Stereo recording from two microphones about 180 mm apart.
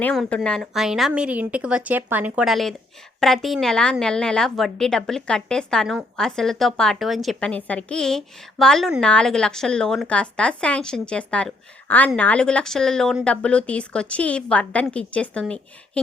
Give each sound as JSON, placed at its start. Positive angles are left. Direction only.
{"t": 0.0, "sound": "a woman's voice", "side_deg": 5}